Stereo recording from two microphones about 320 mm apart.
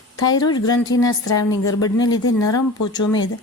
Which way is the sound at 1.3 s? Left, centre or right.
Left.